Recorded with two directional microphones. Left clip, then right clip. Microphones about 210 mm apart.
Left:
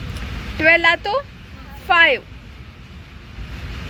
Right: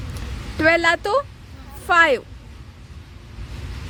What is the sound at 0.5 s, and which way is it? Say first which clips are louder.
Speech: left 3 dB; 30° right (ahead or behind).